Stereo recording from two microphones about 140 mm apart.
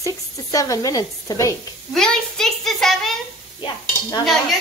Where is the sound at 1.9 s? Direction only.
5° left (ahead or behind).